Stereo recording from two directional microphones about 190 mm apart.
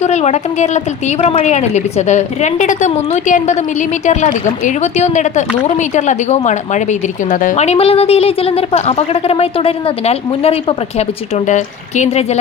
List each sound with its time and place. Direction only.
0.0 s a woman's voice: 35° left (ahead or behind)